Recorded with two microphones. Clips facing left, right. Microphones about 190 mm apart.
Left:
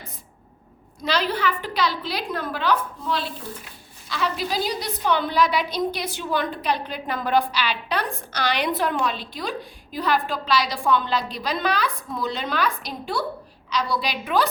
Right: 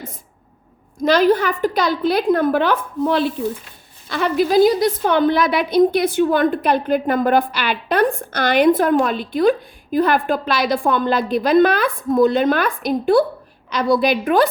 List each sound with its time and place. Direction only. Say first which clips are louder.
1.0 s a woman's voice: right 9 dB; 50° right (ahead or behind)